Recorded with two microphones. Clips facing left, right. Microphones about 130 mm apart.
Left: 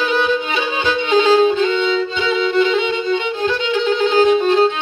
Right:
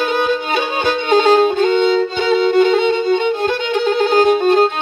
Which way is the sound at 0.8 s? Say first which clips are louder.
Right 1 dB; 50° right (ahead or behind).